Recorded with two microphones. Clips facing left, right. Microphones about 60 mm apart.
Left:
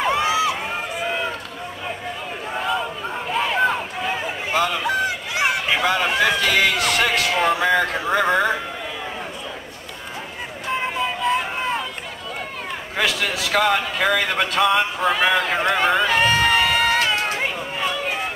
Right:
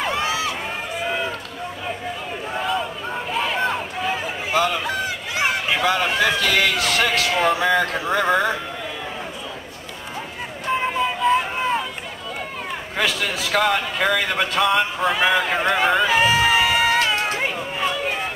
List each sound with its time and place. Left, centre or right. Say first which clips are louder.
0.2 s run: left 4 dB; centre
0.9 s run: right 1 dB; centre
2.5 s run: even; centre
5.3 s speech: right 1 dB; centre
10.7 s music: right 2 dB; centre
12.9 s speech: left 1 dB; centre